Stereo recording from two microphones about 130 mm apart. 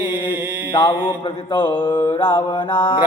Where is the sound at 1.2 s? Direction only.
40° left (ahead or behind).